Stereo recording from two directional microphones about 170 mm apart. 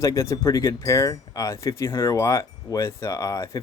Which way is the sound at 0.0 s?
15° left (ahead or behind).